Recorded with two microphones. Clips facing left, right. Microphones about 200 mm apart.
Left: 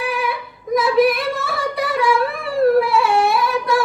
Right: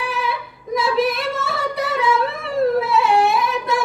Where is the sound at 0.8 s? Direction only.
25° right (ahead or behind).